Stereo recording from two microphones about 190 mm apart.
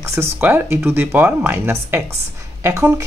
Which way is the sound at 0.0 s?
15° right (ahead or behind).